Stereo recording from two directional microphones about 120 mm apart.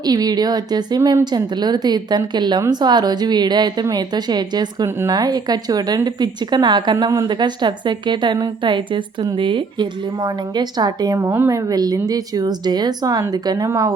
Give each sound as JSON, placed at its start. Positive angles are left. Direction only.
{"t": 0.0, "sound": "a woman's voice", "side_deg": -35}